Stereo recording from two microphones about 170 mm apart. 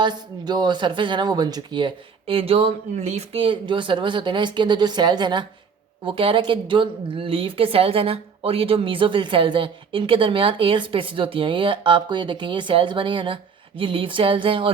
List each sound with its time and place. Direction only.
0.0 s a woman's voice: 25° right (ahead or behind)